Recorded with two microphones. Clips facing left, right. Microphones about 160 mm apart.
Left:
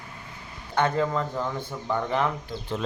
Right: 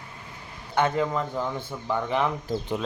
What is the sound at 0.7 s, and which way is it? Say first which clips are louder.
Speech: even; 10° right (ahead or behind).